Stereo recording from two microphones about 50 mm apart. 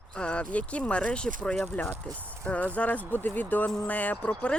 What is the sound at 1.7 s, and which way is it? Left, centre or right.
Speech, left.